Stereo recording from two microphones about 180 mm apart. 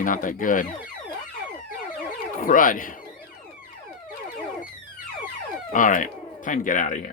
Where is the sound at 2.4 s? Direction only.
50° left (ahead or behind).